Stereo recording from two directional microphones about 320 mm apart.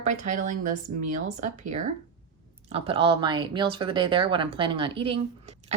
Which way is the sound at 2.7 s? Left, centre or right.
Centre.